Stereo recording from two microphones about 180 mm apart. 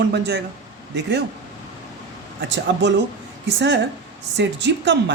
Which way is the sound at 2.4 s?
85° right.